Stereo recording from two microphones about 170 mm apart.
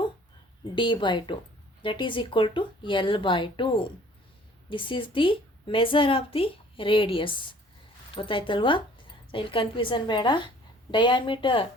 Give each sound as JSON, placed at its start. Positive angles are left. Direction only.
{"t": 0.8, "sound": "a woman's voice", "side_deg": 30}